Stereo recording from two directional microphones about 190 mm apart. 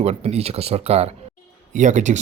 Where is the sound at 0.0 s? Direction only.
35° right (ahead or behind).